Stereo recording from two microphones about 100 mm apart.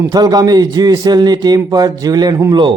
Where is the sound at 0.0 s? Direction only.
40° right (ahead or behind).